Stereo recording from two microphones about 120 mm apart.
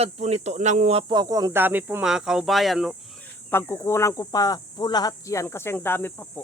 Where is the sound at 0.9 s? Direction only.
40° right (ahead or behind).